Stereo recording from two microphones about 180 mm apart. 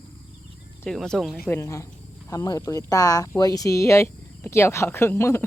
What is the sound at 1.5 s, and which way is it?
Speech, 15° left (ahead or behind).